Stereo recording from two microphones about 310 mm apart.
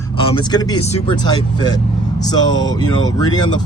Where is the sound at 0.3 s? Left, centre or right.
Centre.